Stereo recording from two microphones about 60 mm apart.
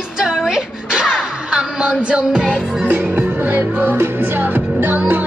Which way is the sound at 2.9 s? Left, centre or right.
Right.